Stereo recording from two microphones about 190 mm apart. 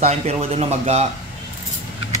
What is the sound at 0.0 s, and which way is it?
A man's voice, 35° right (ahead or behind).